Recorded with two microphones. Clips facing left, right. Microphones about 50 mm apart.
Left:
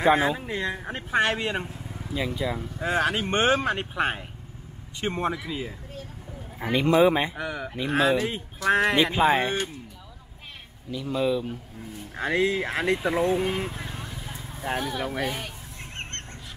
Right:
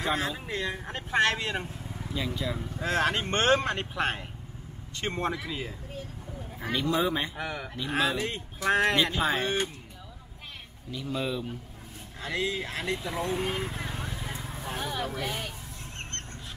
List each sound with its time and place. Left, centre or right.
0.0 s speech: left
5.4 s speech: centre
6.6 s speech: left
7.3 s speech: centre
8.9 s speech: centre
10.9 s speech: centre
12.2 s speech: left
13.3 s speech: centre
13.7 s vehicle: centre
14.7 s speech: left
15.2 s speech: centre